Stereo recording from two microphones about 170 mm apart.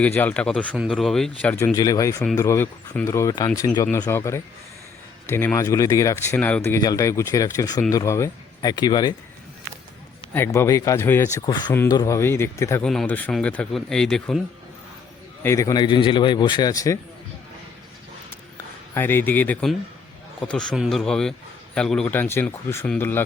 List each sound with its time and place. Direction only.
0.0 s speech: 10° left (ahead or behind)
10.3 s speech: 15° left (ahead or behind)
12.8 s speech: 5° left (ahead or behind)
15.4 s speech: 20° left (ahead or behind)
18.9 s speech: 15° left (ahead or behind)